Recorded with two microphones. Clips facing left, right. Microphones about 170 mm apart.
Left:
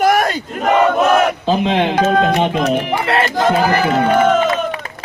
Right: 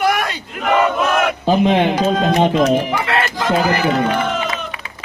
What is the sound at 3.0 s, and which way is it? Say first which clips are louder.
Speech: left 4 dB; 35° left (ahead or behind).